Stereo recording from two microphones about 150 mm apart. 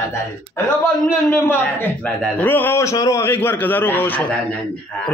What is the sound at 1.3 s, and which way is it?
A man's voice, 15° left (ahead or behind).